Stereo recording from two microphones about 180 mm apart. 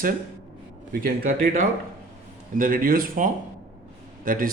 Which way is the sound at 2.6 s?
50° right (ahead or behind).